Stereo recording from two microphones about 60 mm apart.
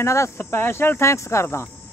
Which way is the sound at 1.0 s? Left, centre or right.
Left.